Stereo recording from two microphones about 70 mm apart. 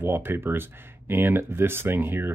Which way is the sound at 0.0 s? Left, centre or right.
Right.